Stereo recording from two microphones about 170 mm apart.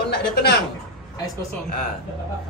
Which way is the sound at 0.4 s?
75° left (ahead or behind).